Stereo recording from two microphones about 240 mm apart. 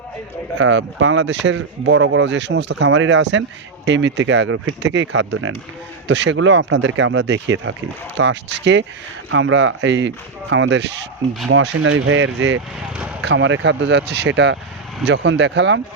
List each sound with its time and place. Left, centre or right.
0.6 s speech: right